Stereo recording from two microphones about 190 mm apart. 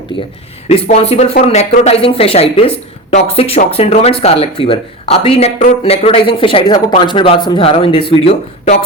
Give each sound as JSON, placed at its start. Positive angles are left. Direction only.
{"t": 0.7, "sound": "a woman's voice", "side_deg": 30}